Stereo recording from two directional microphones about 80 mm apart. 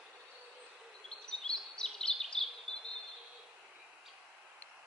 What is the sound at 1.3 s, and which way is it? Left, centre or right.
Bird vocalization, centre.